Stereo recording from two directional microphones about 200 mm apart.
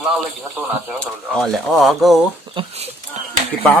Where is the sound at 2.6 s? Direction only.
30° right (ahead or behind).